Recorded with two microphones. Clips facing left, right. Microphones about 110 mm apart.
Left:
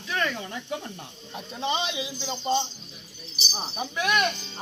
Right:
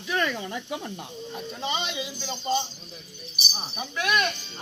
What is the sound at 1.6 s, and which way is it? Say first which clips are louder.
Speech: left 3 dB; 20° left (ahead or behind).